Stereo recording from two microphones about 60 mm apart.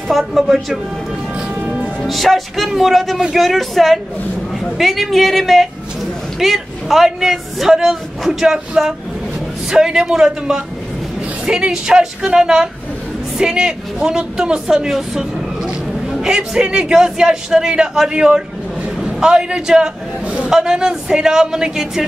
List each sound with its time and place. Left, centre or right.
0.2 s a man's voice: centre
1.5 s music: right
2.0 s a man's voice: centre